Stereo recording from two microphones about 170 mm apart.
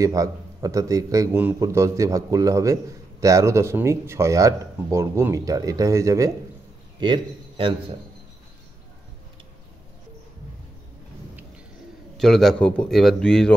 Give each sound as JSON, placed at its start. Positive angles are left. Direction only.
{"t": 0.0, "sound": "a man's voice", "side_deg": -20}
{"t": 7.0, "sound": "a man's voice", "side_deg": -30}
{"t": 12.2, "sound": "a man's voice", "side_deg": 0}